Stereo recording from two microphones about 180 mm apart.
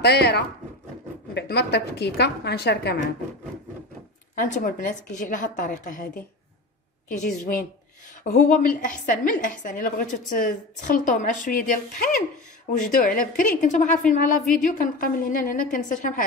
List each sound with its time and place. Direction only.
0.0 s a woman's voice: 65° left (ahead or behind)
4.4 s a woman's voice: 45° left (ahead or behind)